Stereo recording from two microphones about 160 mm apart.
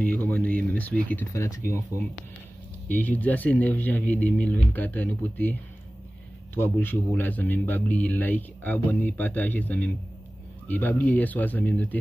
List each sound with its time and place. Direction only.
0.0 s a man's voice: 10° left (ahead or behind)
2.9 s a man's voice: 10° left (ahead or behind)